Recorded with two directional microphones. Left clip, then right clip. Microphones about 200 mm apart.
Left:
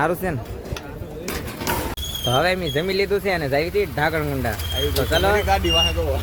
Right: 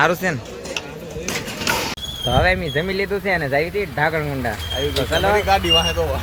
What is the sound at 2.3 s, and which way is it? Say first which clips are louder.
Speech: right 2 dB; 15° left (ahead or behind).